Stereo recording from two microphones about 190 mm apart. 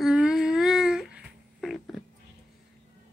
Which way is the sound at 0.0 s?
5° right (ahead or behind).